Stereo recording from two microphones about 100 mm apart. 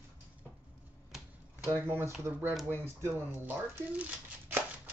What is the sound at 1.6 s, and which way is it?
Speech, 20° right (ahead or behind).